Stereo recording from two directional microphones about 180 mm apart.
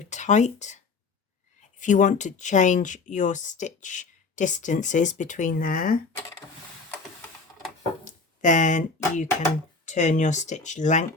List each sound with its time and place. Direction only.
0.0 s speech: 40° left (ahead or behind)
1.8 s speech: 45° left (ahead or behind)
8.0 s speech: 45° left (ahead or behind)